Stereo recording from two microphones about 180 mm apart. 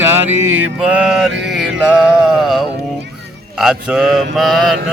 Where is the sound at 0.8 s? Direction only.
5° right (ahead or behind).